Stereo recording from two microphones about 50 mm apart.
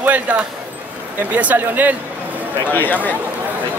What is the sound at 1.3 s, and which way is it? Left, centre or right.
Speech, right.